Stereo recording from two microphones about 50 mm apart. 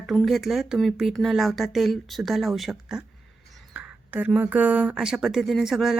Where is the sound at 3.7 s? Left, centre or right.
Right.